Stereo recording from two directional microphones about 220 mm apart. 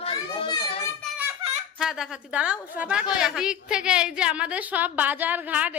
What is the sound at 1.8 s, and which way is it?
A woman's voice, centre (ahead or behind).